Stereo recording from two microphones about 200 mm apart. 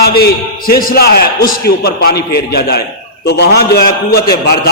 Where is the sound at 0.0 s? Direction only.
50° left (ahead or behind).